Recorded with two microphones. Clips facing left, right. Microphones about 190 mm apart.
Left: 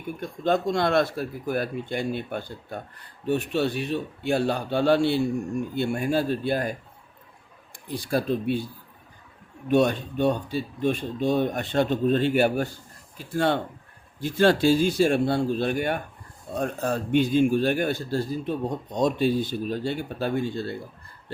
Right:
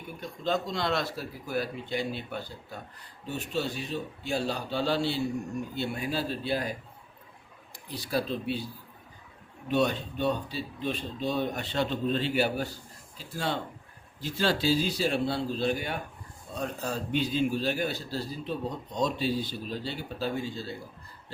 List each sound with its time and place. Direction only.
0.2 s a man's voice: 55° left (ahead or behind)
7.9 s speech: 50° left (ahead or behind)
9.6 s a man's voice: 50° left (ahead or behind)